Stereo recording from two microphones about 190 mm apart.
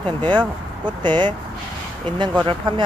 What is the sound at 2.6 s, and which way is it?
Speech, 25° right (ahead or behind).